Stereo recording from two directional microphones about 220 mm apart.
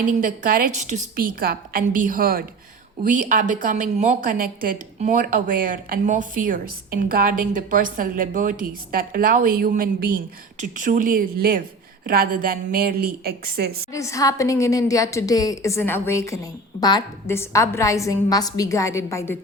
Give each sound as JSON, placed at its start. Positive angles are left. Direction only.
{"t": 0.2, "sound": "a woman's voice", "side_deg": -40}
{"t": 13.9, "sound": "a woman's voice", "side_deg": 15}